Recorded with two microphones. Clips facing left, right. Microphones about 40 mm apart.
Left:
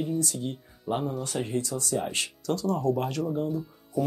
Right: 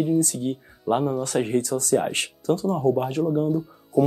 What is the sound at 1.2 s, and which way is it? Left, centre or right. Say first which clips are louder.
Speech: right 7 dB; right.